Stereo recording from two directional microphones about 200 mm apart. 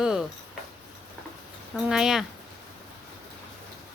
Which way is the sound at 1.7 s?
Centre (ahead or behind).